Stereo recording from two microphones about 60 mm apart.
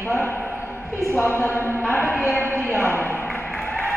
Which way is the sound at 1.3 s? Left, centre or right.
Left.